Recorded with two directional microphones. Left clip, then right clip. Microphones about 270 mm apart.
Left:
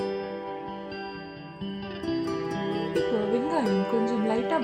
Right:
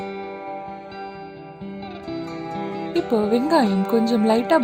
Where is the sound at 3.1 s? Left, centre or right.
Right.